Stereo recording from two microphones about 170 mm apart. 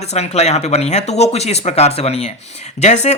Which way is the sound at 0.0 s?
40° left (ahead or behind).